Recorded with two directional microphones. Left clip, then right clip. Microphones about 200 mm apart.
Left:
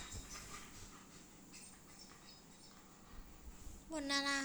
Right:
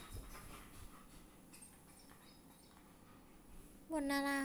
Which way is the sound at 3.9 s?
30° right (ahead or behind).